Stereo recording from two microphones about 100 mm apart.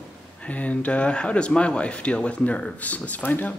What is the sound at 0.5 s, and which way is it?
Speech, 15° left (ahead or behind).